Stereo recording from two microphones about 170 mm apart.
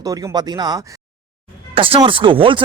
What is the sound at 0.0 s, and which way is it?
Speech, 20° right (ahead or behind).